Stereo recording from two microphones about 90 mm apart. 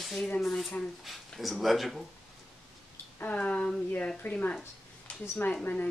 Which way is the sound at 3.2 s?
15° left (ahead or behind).